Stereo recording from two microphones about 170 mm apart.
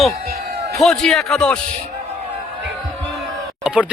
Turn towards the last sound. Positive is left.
turn(degrees=-5)  # may be behind; listen again after turning